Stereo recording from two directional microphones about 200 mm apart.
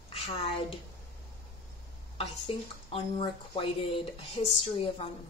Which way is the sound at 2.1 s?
25° left (ahead or behind).